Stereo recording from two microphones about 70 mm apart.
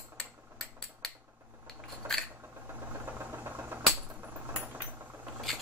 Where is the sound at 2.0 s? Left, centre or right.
Right.